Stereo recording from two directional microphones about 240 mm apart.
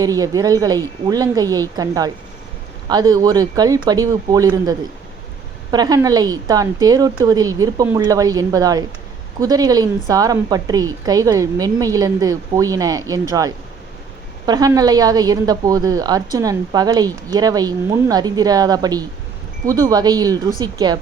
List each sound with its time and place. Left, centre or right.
0.0 s a woman's voice: centre
5.7 s a woman's voice: centre